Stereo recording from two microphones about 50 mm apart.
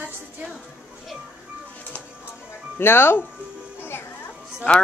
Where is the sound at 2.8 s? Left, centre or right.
Left.